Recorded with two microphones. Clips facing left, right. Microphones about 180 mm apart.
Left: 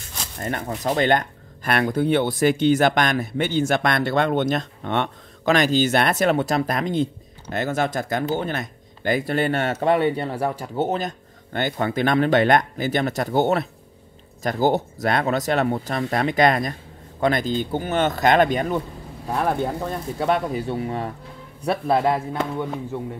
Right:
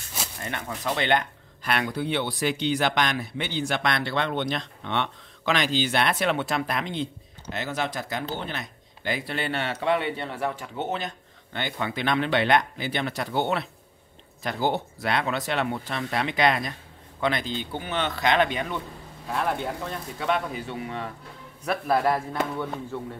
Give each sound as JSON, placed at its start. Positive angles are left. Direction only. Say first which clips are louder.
{"t": 0.4, "sound": "speech", "louder": "left 8 dB", "side_deg": 40}
{"t": 21.6, "sound": "a man's voice", "louder": "left 3 dB", "side_deg": 25}